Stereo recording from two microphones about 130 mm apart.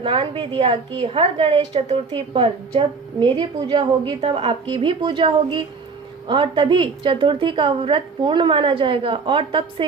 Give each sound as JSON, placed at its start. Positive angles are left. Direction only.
{"t": 0.0, "sound": "a woman's voice", "side_deg": -45}
{"t": 4.2, "sound": "a woman's voice", "side_deg": -45}